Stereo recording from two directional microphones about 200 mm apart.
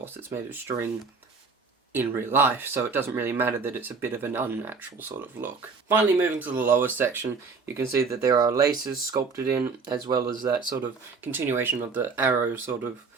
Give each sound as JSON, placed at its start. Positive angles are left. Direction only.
{"t": 0.0, "sound": "speech", "side_deg": -10}
{"t": 1.9, "sound": "speech", "side_deg": -10}
{"t": 11.2, "sound": "speech", "side_deg": -10}